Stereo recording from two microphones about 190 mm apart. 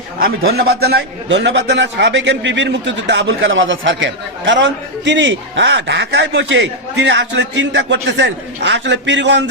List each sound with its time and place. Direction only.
0.2 s a man's voice: 55° right (ahead or behind)